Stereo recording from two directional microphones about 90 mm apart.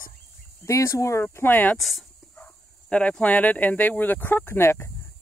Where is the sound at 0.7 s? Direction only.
35° left (ahead or behind).